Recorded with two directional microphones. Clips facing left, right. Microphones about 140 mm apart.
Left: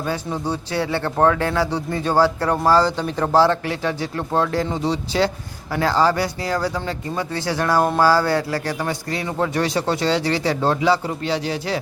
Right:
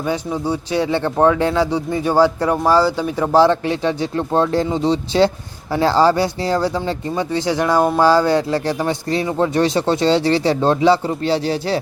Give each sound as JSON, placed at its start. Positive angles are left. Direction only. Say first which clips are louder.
{"t": 0.3, "sound": "speech", "louder": "right 4 dB", "side_deg": -10}